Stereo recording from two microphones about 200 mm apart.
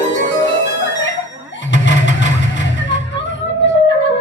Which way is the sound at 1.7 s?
65° left (ahead or behind).